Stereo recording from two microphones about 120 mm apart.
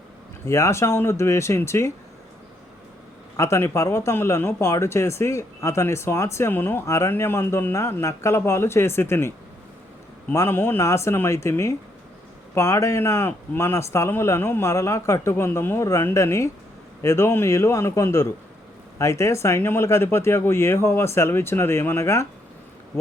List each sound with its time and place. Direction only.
0.4 s speech: 25° left (ahead or behind)
3.3 s speech: 25° left (ahead or behind)
10.3 s speech: 20° left (ahead or behind)